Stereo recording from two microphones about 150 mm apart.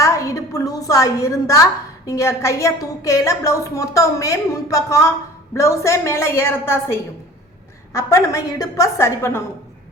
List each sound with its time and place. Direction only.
0.0 s a woman's voice: 20° left (ahead or behind)